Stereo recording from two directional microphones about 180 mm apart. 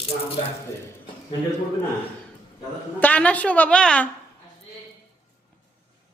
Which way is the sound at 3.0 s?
10° left (ahead or behind).